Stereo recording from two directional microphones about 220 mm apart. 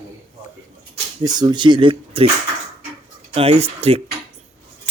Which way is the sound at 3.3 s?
30° right (ahead or behind).